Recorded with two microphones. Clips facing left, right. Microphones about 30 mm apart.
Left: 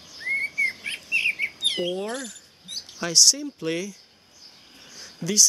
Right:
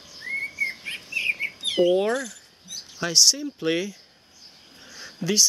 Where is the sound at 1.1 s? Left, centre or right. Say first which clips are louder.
Left 2 dB; left.